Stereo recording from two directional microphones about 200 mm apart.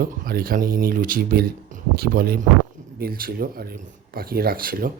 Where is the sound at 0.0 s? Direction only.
45° right (ahead or behind).